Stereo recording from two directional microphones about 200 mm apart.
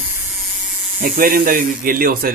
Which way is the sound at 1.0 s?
45° right (ahead or behind).